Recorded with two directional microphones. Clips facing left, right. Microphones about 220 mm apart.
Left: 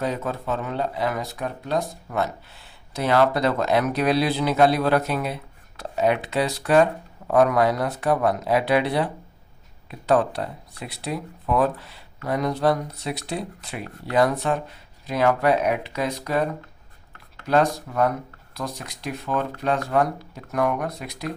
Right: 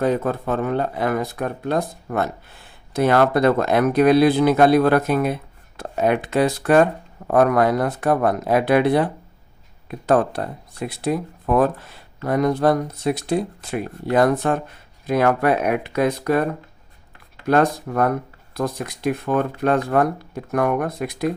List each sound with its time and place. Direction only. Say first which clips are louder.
0.0 s speech: right 6 dB; 50° right (ahead or behind)